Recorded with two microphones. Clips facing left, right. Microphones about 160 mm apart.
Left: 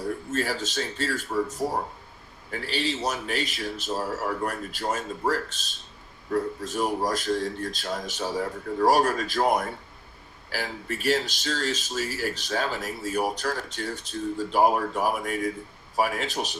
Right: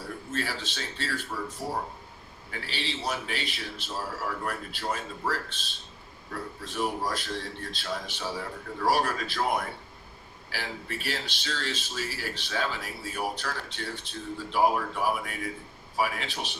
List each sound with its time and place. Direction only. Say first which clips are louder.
0.3 s speech: left 5 dB; 45° left (ahead or behind)